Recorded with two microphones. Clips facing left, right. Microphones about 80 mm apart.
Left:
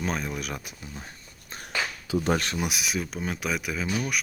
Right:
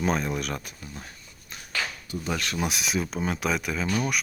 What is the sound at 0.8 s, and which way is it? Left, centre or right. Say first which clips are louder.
Speech: even; left.